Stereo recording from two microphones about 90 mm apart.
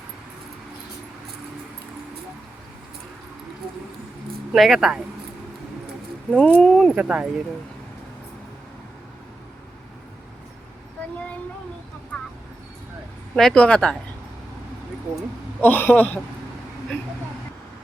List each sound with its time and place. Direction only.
4.5 s speech: centre (ahead or behind)
6.3 s speech: 10° left (ahead or behind)
6.9 s speech: 15° right (ahead or behind)
13.3 s speech: 10° left (ahead or behind)
15.6 s speech: 20° left (ahead or behind)